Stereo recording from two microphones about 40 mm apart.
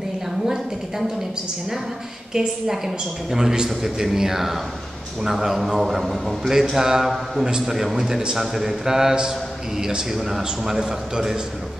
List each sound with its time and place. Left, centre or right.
2.3 s a woman's voice: centre